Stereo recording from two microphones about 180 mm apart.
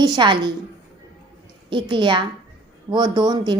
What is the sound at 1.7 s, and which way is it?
A woman's voice, 25° right (ahead or behind).